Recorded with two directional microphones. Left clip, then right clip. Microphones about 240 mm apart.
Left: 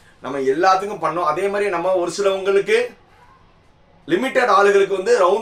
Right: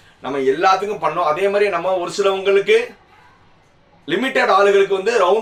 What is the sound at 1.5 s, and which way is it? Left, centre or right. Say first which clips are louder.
A man's voice: right 2 dB; centre.